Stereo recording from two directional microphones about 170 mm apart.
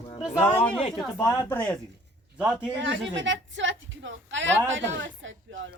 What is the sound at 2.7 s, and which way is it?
A woman's voice, 90° right.